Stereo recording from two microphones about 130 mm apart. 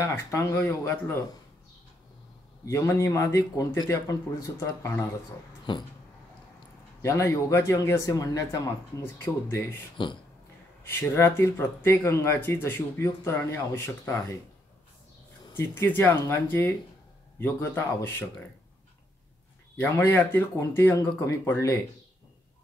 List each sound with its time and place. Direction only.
0.0 s speech: 20° left (ahead or behind)
2.6 s speech: 20° left (ahead or behind)
5.7 s a sound: 35° left (ahead or behind)
7.0 s speech: 20° left (ahead or behind)
15.5 s speech: 15° left (ahead or behind)
19.8 s speech: 15° left (ahead or behind)